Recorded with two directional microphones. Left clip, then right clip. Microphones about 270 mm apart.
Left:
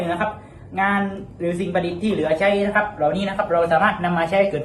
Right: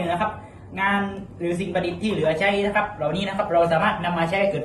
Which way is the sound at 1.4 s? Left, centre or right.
Centre.